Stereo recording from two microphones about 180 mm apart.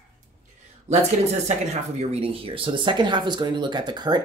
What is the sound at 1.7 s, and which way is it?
Speech, 35° right (ahead or behind).